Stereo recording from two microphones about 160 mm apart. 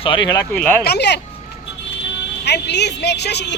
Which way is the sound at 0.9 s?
90° left.